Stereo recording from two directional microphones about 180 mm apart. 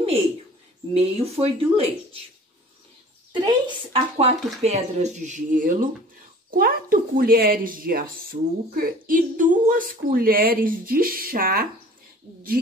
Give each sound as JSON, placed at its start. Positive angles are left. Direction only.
{"t": 0.9, "sound": "speech", "side_deg": -35}
{"t": 3.3, "sound": "speech", "side_deg": -25}